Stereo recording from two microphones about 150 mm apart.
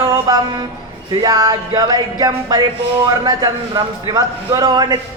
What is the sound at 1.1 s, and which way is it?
A man's voice, 25° right (ahead or behind).